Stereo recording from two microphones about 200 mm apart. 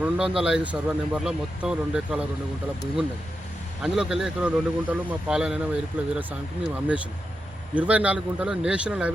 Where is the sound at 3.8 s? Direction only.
5° right (ahead or behind).